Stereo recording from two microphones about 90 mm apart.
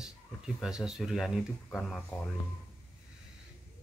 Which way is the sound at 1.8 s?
10° left (ahead or behind).